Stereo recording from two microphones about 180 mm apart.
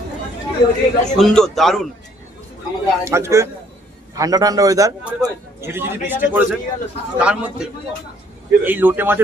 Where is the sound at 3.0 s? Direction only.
15° right (ahead or behind).